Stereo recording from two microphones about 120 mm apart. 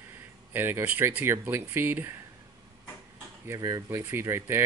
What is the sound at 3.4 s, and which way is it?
Speech, 30° right (ahead or behind).